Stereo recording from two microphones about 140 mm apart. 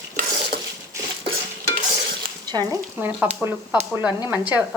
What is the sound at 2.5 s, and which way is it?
Speech, 30° right (ahead or behind).